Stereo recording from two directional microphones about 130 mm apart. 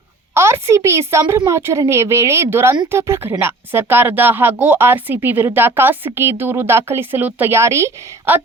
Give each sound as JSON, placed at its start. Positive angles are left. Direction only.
{"t": 0.3, "sound": "a woman's voice", "side_deg": -20}